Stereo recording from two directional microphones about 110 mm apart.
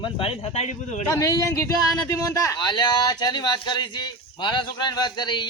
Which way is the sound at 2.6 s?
40° left (ahead or behind).